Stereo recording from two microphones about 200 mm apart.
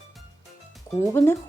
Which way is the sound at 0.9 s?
10° left (ahead or behind).